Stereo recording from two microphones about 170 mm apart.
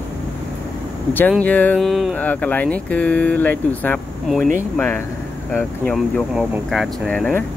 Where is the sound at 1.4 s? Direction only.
10° left (ahead or behind).